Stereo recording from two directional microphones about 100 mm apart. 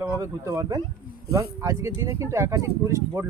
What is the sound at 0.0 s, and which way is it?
Speech, 30° right (ahead or behind).